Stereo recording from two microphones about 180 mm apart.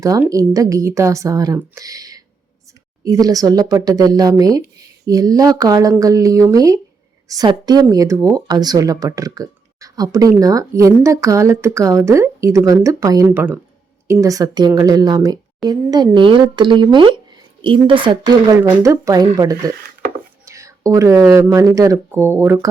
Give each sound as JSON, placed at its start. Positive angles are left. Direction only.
{"t": 0.0, "sound": "a woman's voice", "side_deg": -20}